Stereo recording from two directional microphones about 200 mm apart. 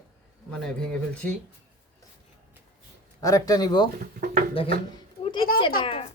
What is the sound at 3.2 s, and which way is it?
A child's voice, 15° left (ahead or behind).